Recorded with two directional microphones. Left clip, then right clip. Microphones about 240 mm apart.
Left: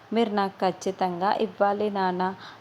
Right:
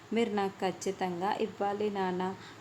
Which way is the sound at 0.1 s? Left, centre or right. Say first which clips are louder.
Left 6 dB; centre.